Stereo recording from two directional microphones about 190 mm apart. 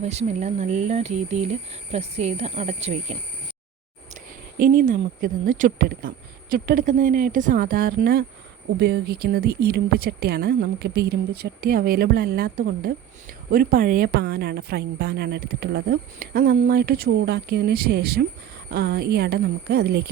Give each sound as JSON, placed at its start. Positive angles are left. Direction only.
{"t": 0.0, "sound": "speech", "side_deg": -35}
{"t": 4.8, "sound": "a woman's voice", "side_deg": -45}